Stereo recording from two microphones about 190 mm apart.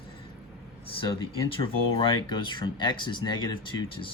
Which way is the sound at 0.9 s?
25° left (ahead or behind).